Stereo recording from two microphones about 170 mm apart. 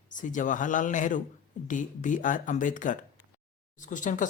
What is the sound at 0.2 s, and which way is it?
Speech, 50° left (ahead or behind).